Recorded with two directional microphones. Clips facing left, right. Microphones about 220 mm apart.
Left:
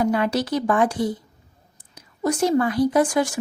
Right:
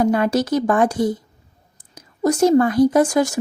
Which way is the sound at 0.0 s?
45° right (ahead or behind).